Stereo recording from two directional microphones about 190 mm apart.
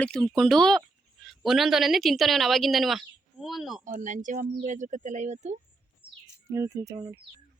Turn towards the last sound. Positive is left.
turn(degrees=-15)  # may be behind; listen again after turning